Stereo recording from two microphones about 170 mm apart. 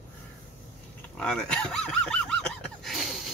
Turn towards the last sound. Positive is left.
turn(degrees=0)  # may be behind; listen again after turning